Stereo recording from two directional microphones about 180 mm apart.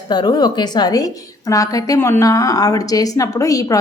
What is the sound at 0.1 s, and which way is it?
A woman's voice, 25° left (ahead or behind).